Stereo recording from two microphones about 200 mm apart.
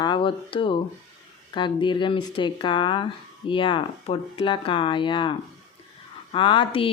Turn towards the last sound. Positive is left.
turn(degrees=25)  # may be behind; listen again after turning